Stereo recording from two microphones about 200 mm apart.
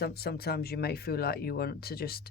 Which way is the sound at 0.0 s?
50° left (ahead or behind).